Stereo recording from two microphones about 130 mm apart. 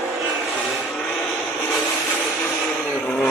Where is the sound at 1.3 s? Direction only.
15° left (ahead or behind).